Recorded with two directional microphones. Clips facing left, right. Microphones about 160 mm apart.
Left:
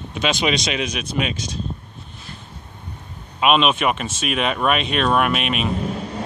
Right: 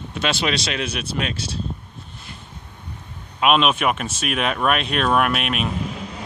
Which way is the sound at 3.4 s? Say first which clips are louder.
Left 1 dB; centre (ahead or behind).